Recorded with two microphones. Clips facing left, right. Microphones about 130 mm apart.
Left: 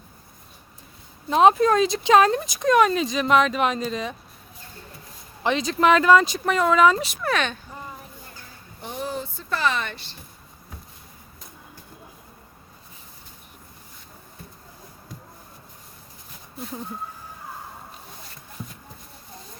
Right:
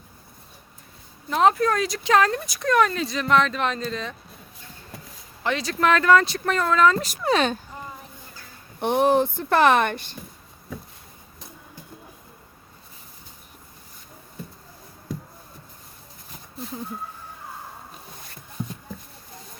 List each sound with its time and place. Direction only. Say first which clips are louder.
1.3 s speech: left 3 dB; 20° left (ahead or behind)
5.4 s speech: left 3 dB; 20° left (ahead or behind)
7.2 s speech: right 3 dB; 30° right (ahead or behind)
8.8 s a woman's voice: right 12 dB; 65° right (ahead or behind)